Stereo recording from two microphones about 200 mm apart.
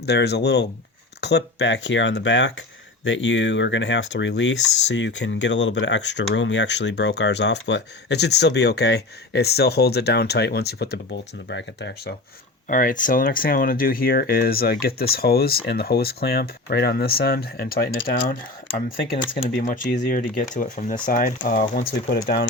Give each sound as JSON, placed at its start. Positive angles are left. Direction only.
{"t": 0.0, "sound": "speech", "side_deg": 55}
{"t": 12.6, "sound": "speech", "side_deg": 40}